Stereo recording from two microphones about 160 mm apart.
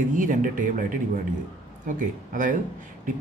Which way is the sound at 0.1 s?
55° right (ahead or behind).